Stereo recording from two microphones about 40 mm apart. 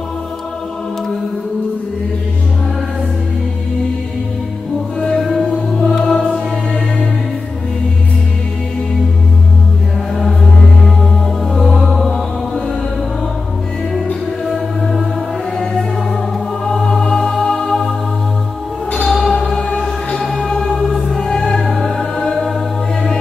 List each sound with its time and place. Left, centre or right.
5.0 s music: centre
11.5 s music: centre
14.4 s music: centre
17.1 s music: centre
19.0 s music: centre
20.2 s music: centre